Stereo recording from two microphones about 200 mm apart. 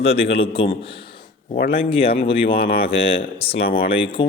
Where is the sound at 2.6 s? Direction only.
50° left (ahead or behind).